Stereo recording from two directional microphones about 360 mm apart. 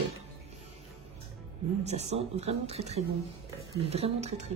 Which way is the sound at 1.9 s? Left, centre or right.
Centre.